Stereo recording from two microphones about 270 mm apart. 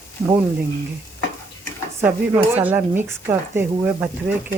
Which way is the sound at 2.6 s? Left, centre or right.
Centre.